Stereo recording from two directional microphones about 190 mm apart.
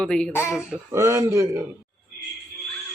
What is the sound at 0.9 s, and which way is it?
Speech, 15° right (ahead or behind).